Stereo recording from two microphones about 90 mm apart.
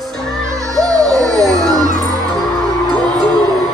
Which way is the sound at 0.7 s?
45° right (ahead or behind).